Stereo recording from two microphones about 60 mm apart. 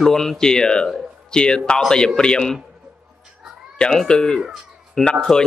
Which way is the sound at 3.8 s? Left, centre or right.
Centre.